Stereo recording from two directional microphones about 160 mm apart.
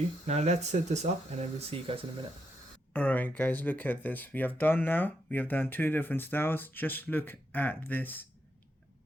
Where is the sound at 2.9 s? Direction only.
10° left (ahead or behind).